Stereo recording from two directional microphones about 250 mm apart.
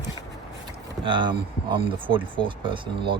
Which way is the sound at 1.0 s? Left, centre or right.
Centre.